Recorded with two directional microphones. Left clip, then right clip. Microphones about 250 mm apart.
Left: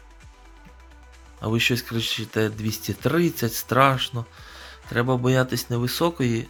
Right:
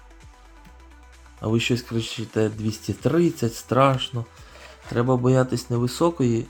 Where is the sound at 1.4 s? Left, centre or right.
Centre.